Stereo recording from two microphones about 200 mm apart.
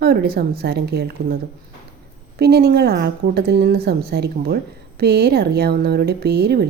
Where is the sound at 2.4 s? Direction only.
55° right (ahead or behind).